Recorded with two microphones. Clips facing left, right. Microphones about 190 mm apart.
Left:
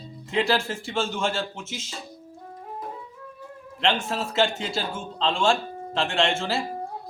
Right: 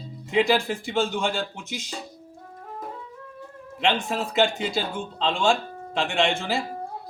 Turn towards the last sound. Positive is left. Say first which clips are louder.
# even
turn(degrees=-15)  # may be behind; listen again after turning